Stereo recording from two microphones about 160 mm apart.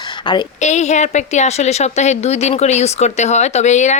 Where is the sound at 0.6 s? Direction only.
45° left (ahead or behind).